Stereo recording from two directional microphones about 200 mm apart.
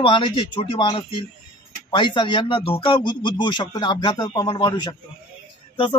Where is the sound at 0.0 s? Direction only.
25° left (ahead or behind).